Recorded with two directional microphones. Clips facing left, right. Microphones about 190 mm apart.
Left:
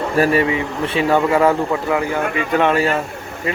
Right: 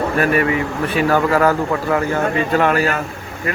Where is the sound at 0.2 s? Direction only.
25° left (ahead or behind).